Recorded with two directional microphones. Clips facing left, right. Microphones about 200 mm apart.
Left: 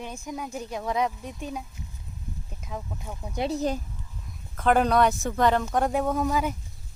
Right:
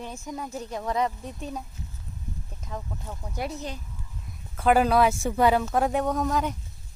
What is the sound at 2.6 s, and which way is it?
Speech, 5° left (ahead or behind).